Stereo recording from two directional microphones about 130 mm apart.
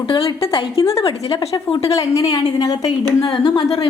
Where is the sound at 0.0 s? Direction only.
40° left (ahead or behind).